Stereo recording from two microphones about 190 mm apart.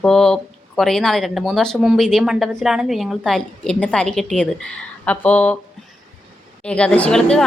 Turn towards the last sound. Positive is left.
turn(degrees=5)  # may be behind; listen again after turning